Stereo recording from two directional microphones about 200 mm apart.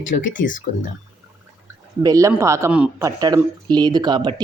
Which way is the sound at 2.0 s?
15° right (ahead or behind).